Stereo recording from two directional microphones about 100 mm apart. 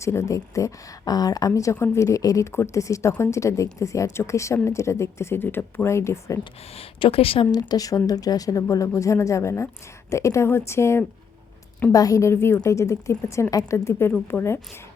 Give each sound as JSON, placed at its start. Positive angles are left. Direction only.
{"t": 0.0, "sound": "a woman's voice", "side_deg": 30}
{"t": 6.7, "sound": "speech", "side_deg": 75}
{"t": 7.7, "sound": "a woman's voice", "side_deg": 35}